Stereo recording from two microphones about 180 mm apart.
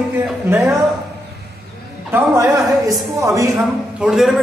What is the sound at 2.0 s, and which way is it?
A woman's voice, 15° right (ahead or behind).